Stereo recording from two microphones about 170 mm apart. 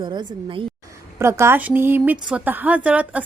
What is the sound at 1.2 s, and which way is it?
A woman's voice, 15° right (ahead or behind).